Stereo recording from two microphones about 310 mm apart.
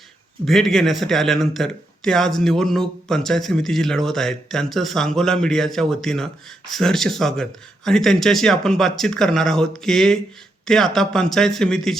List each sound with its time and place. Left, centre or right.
0.4 s speech: centre